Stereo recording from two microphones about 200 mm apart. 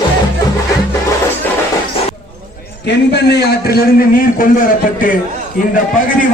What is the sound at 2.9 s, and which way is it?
A man's voice, 55° left (ahead or behind).